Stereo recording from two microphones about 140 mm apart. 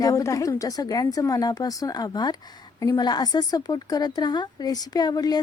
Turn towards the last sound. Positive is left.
turn(degrees=30)  # may be behind; listen again after turning